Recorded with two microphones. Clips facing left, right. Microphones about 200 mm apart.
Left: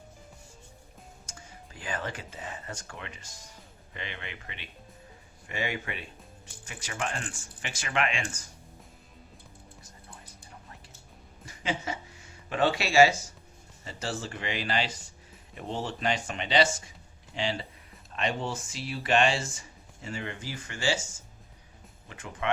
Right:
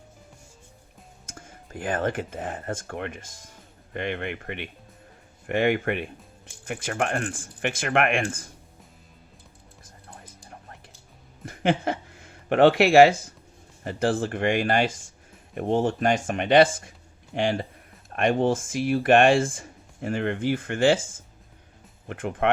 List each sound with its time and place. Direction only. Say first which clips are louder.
1.3 s speech: right 11 dB; 50° right (ahead or behind)
9.8 s music: right 3 dB; 55° right (ahead or behind)
11.4 s a sound: right 9 dB; 55° right (ahead or behind)
13.8 s speech: right 11 dB; 55° right (ahead or behind)